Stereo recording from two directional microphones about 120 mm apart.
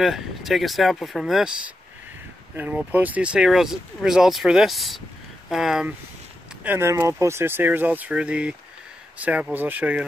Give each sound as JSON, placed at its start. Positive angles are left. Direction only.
{"t": 0.0, "sound": "speech", "side_deg": 0}
{"t": 2.5, "sound": "speech", "side_deg": -15}
{"t": 6.6, "sound": "speech", "side_deg": -20}